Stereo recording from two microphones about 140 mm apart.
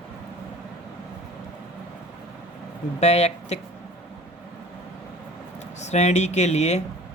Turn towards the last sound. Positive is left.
turn(degrees=55)  # may be behind; listen again after turning